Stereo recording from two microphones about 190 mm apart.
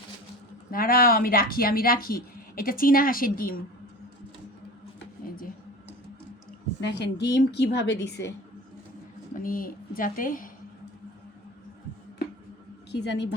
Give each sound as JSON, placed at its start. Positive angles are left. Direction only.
{"t": 0.7, "sound": "speech", "side_deg": 50}
{"t": 6.8, "sound": "a woman's voice", "side_deg": 65}
{"t": 9.3, "sound": "speech", "side_deg": 45}
{"t": 12.9, "sound": "a woman's voice", "side_deg": 65}